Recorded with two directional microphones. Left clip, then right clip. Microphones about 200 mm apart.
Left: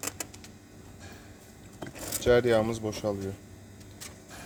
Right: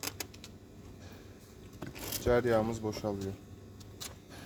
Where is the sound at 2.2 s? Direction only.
10° left (ahead or behind).